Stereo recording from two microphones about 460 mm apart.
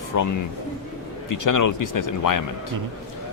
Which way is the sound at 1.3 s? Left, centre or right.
Left.